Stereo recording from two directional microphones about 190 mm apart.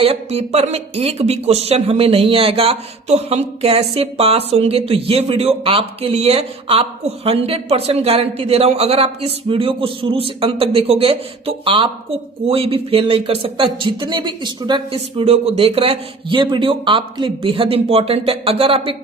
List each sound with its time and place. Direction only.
0.0 s speech: 30° right (ahead or behind)